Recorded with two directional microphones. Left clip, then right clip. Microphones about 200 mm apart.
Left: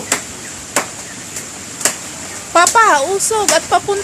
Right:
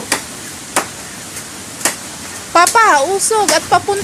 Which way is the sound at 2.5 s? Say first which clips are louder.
Right 1 dB; centre (ahead or behind).